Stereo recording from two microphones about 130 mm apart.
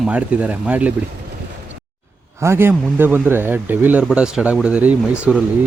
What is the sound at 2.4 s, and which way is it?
Speech, 20° right (ahead or behind).